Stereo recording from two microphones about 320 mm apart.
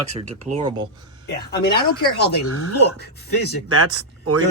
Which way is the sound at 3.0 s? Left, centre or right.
Left.